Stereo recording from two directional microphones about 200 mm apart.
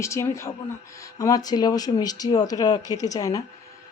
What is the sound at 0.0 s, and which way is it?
Speech, 15° left (ahead or behind).